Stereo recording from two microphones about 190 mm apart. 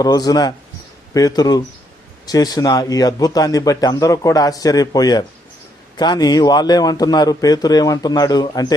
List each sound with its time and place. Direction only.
0.0 s a man's voice: 20° left (ahead or behind)